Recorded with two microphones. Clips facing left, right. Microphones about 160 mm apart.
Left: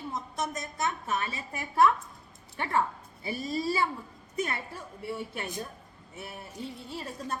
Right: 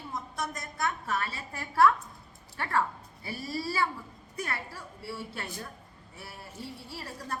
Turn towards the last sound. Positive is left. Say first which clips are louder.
# left 3 dB
turn(degrees=20)  # may be behind; listen again after turning